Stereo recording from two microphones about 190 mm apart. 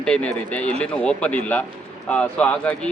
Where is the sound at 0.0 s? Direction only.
5° left (ahead or behind).